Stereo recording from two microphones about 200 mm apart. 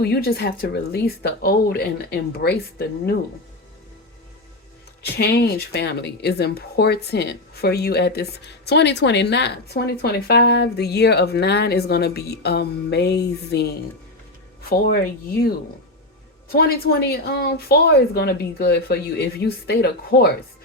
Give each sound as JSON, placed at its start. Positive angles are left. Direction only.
{"t": 0.0, "sound": "a woman's voice", "side_deg": 50}
{"t": 5.0, "sound": "speech", "side_deg": 55}
{"t": 16.5, "sound": "a woman's voice", "side_deg": 50}